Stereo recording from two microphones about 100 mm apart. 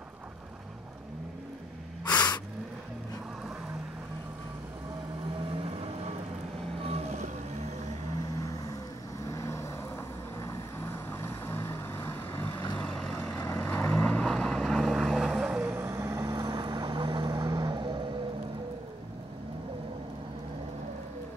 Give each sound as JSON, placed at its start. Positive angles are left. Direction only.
{"t": 2.0, "sound": "gasp", "side_deg": 45}
{"t": 6.9, "sound": "vehicle", "side_deg": -90}
{"t": 8.4, "sound": "vehicle", "side_deg": 35}
{"t": 12.7, "sound": "vehicle", "side_deg": 10}
{"t": 14.3, "sound": "vehicle", "side_deg": 5}
{"t": 15.6, "sound": "vehicle", "side_deg": -25}
{"t": 17.3, "sound": "vehicle", "side_deg": -35}